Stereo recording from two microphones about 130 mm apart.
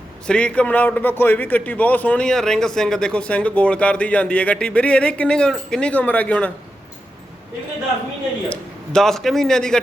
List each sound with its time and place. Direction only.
0.3 s a man's voice: 10° left (ahead or behind)
8.4 s a man's voice: 5° left (ahead or behind)